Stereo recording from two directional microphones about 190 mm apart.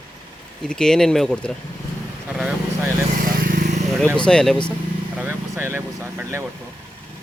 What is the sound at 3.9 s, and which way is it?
Speech, 5° left (ahead or behind).